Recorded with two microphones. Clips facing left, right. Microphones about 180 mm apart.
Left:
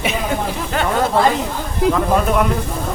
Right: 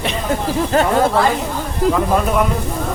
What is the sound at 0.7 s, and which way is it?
Speech, 35° right (ahead or behind).